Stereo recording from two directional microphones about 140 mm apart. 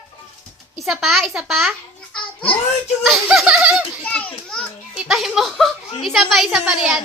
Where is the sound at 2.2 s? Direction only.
40° left (ahead or behind).